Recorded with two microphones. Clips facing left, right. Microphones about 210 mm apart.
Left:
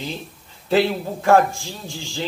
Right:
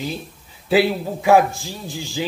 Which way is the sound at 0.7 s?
5° right (ahead or behind).